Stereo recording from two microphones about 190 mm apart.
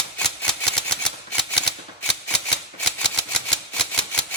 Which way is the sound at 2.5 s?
5° left (ahead or behind).